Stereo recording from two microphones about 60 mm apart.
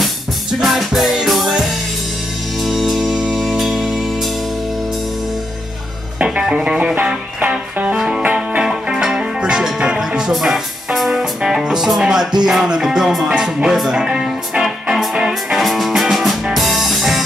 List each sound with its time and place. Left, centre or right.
0.0 s music: centre
6.1 s music: centre